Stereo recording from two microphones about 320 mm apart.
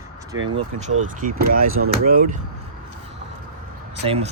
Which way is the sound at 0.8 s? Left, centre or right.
Right.